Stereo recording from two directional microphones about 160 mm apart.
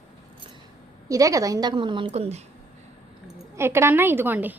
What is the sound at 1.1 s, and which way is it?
A woman's voice, 20° right (ahead or behind).